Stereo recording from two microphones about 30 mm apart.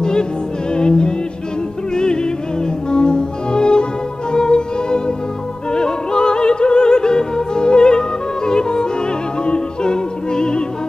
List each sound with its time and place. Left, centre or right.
0.0 s music: left